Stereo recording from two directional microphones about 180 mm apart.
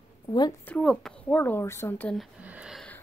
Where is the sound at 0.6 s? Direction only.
5° left (ahead or behind).